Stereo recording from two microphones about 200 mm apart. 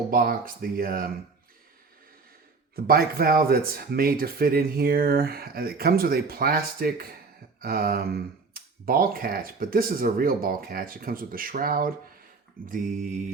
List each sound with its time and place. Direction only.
0.1 s speech: 45° right (ahead or behind)
2.7 s speech: 50° right (ahead or behind)
12.6 s mantra: 40° right (ahead or behind)